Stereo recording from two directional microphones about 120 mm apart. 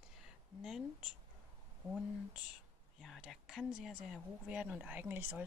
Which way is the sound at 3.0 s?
Centre (ahead or behind).